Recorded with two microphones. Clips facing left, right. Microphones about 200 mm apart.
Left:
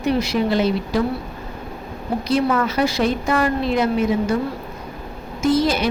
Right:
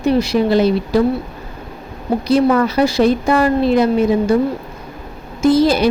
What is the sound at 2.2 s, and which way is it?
Speech, 35° right (ahead or behind).